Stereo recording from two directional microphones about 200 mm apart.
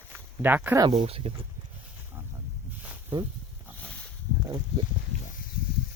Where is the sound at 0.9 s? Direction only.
30° right (ahead or behind).